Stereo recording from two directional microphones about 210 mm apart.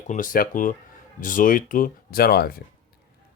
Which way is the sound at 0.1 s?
40° left (ahead or behind).